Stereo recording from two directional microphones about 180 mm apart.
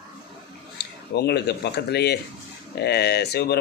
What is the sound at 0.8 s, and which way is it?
Speech, 65° left (ahead or behind).